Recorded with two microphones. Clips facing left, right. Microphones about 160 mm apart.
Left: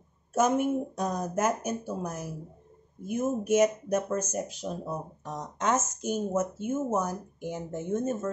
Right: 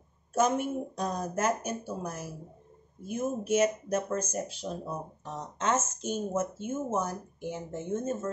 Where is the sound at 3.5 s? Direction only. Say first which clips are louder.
Left 2 dB; 15° left (ahead or behind).